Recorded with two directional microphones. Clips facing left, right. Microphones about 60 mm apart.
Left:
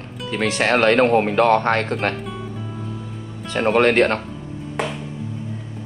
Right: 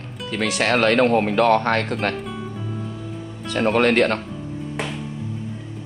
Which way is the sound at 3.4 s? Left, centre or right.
Left.